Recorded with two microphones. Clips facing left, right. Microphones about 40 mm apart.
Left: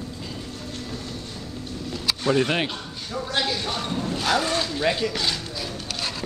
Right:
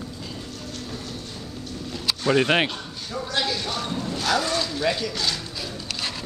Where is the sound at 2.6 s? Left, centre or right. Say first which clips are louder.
Right 1 dB; centre.